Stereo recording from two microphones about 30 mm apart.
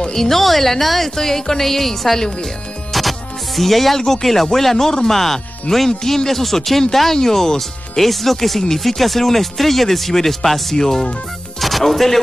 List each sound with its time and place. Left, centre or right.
0.1 s speech: centre
2.9 s music: centre
4.0 s speech: centre
11.6 s speech: centre